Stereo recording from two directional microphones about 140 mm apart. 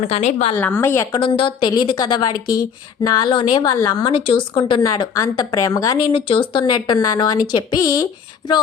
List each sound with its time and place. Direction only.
0.1 s a woman's voice: 55° left (ahead or behind)
0.6 s a woman's voice: 15° left (ahead or behind)
1.1 s a woman's voice: 35° left (ahead or behind)
6.1 s a woman's voice: 40° left (ahead or behind)